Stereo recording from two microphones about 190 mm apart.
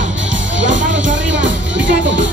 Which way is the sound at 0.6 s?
75° right (ahead or behind).